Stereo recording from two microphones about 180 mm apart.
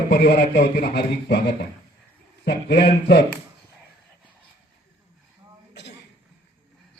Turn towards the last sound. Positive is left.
turn(degrees=70)  # may be behind; listen again after turning